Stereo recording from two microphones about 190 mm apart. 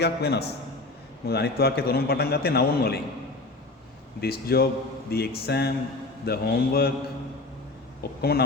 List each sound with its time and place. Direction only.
0.0 s a man's voice: 60° left (ahead or behind)
4.2 s a man's voice: 55° left (ahead or behind)
8.0 s a man's voice: 55° left (ahead or behind)